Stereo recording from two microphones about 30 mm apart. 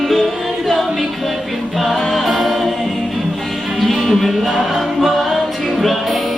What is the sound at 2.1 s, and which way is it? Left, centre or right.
Music, centre.